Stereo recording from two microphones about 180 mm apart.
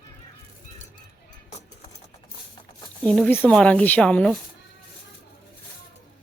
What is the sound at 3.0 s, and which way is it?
Speech, 5° left (ahead or behind).